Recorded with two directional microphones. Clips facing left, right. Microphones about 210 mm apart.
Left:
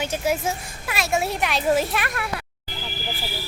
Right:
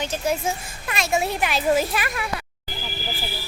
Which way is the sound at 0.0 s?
10° left (ahead or behind).